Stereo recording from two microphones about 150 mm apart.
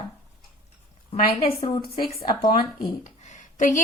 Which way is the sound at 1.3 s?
40° left (ahead or behind).